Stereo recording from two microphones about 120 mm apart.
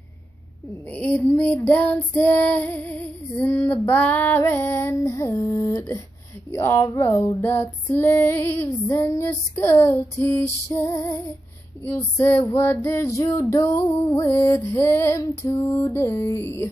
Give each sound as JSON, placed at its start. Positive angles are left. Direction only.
{"t": 0.8, "sound": "female singing", "side_deg": 15}